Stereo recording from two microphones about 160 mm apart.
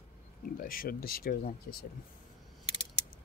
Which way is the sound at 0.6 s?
65° left (ahead or behind).